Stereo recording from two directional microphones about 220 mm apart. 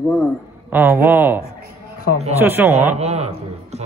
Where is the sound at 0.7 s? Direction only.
10° right (ahead or behind).